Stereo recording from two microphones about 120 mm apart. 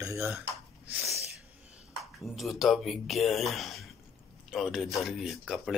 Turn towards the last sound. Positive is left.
turn(degrees=-5)  # may be behind; listen again after turning